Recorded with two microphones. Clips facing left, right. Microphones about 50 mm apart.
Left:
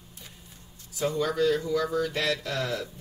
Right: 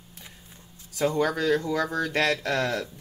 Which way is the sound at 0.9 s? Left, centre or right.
Right.